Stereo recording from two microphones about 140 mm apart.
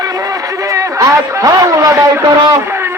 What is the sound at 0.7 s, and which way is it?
A man's voice, 20° right (ahead or behind).